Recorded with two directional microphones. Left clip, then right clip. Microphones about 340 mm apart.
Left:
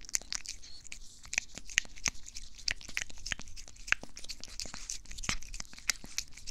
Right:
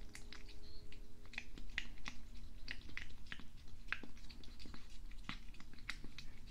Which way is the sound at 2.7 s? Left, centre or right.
Left.